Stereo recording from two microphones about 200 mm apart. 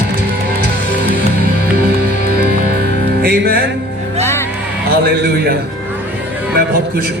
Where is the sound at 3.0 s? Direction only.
50° right (ahead or behind).